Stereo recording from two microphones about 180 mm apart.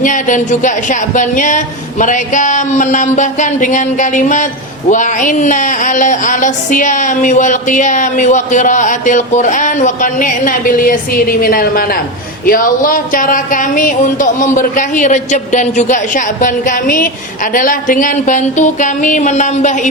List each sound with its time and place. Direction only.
0.0 s speech: 45° left (ahead or behind)